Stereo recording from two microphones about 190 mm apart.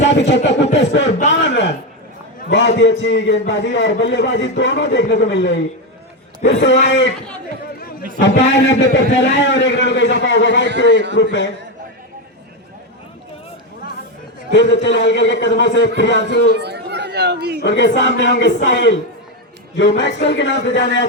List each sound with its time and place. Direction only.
0.0 s speech: 70° left (ahead or behind)
0.8 s a sound: 65° left (ahead or behind)
2.5 s speech: 70° left (ahead or behind)
8.2 s speech: 70° left (ahead or behind)
14.5 s speech: 70° left (ahead or behind)
16.6 s speech: 60° right (ahead or behind)
17.6 s speech: 70° left (ahead or behind)